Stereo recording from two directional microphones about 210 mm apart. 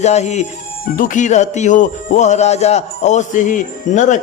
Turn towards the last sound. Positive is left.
turn(degrees=35)  # may be behind; listen again after turning